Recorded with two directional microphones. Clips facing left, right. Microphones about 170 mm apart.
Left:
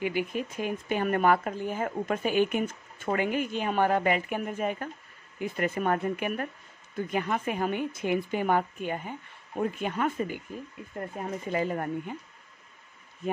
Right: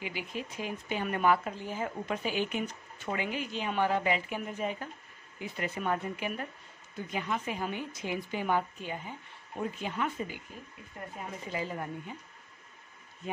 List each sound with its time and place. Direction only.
0.0 s a woman's voice: 55° left (ahead or behind)